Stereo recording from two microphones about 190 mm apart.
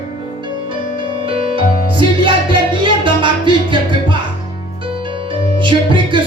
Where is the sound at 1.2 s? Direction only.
30° right (ahead or behind).